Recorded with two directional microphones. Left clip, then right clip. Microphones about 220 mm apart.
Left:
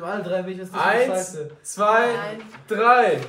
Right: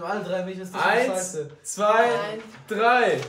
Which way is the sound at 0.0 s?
5° right (ahead or behind).